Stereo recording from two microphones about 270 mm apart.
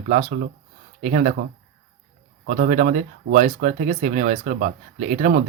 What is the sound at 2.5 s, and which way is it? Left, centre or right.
Speech, right.